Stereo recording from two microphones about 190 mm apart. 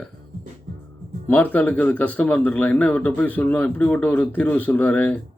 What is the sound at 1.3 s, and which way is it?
A man's voice, 10° left (ahead or behind).